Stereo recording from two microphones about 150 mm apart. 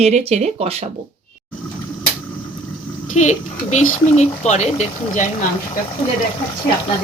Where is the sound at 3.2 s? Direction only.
55° left (ahead or behind).